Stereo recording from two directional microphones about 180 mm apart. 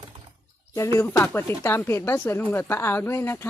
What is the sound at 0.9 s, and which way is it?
A woman's voice, 15° left (ahead or behind).